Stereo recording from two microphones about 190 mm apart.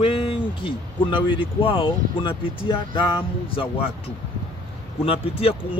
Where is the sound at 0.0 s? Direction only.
30° left (ahead or behind).